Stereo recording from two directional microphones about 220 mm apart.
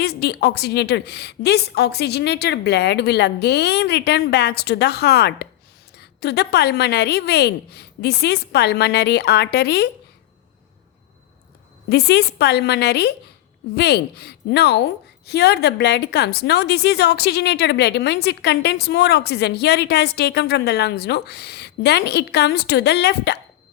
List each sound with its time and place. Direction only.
0.0 s a woman's voice: 45° left (ahead or behind)
11.9 s a woman's voice: 50° left (ahead or behind)